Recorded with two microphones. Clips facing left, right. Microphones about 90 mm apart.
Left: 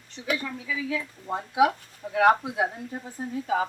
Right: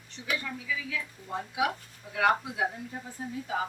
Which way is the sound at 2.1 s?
50° left (ahead or behind).